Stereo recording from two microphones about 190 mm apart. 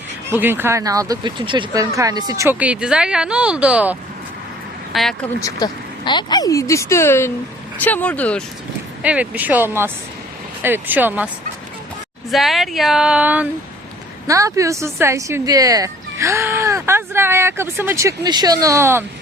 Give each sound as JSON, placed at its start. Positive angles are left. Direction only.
{"t": 0.3, "sound": "speech", "side_deg": -10}
{"t": 5.4, "sound": "speech", "side_deg": 20}
{"t": 9.0, "sound": "speech", "side_deg": -5}
{"t": 12.3, "sound": "speech", "side_deg": 0}